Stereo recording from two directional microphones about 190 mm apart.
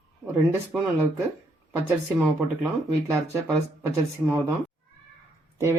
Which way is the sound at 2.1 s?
10° right (ahead or behind).